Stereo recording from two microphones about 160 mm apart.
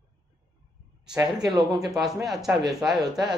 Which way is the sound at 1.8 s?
Centre (ahead or behind).